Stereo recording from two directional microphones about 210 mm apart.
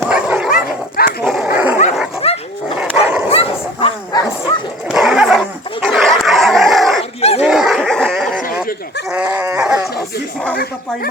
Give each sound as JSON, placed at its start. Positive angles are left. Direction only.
{"t": 0.0, "sound": "dog", "side_deg": -5}
{"t": 0.5, "sound": "dog", "side_deg": 40}
{"t": 1.2, "sound": "dog", "side_deg": -5}
{"t": 2.2, "sound": "dog", "side_deg": 30}
{"t": 2.7, "sound": "dog", "side_deg": -5}
{"t": 3.2, "sound": "bow-wow", "side_deg": 25}
{"t": 4.9, "sound": "dog", "side_deg": -5}
{"t": 7.2, "sound": "dog", "side_deg": 30}
{"t": 7.4, "sound": "laughter", "side_deg": 0}
{"t": 9.0, "sound": "dog", "side_deg": -5}